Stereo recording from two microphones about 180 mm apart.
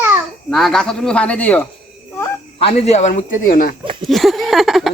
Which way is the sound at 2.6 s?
35° left (ahead or behind).